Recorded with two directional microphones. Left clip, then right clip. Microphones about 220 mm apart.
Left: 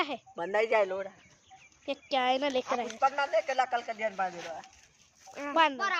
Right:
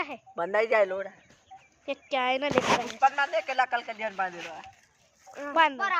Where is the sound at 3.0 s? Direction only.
30° right (ahead or behind).